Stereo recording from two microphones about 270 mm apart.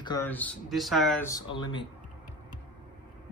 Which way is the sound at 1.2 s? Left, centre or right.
Centre.